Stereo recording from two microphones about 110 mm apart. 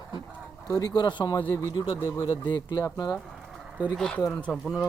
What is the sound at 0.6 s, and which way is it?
Speech, 35° left (ahead or behind).